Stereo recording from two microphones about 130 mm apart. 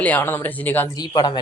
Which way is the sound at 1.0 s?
35° left (ahead or behind).